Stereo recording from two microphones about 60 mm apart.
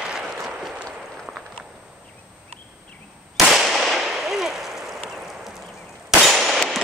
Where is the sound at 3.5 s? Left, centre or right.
Centre.